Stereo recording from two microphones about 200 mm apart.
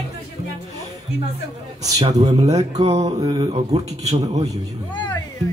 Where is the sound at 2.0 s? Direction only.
35° right (ahead or behind).